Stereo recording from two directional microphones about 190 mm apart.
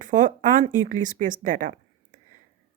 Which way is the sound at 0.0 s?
45° right (ahead or behind).